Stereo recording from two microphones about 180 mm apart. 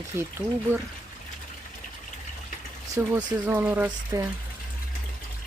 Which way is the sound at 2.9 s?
15° right (ahead or behind).